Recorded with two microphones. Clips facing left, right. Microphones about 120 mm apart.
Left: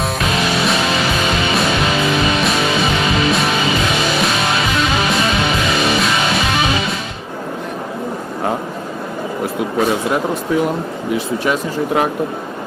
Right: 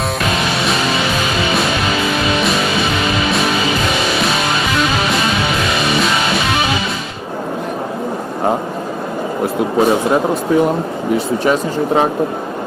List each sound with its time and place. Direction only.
9.7 s speech: 30° right (ahead or behind)